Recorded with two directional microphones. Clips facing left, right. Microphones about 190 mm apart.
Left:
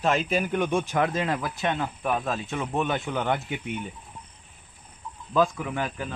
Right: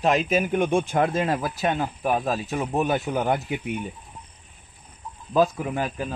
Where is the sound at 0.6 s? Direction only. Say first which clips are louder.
Right 3 dB; 55° right (ahead or behind).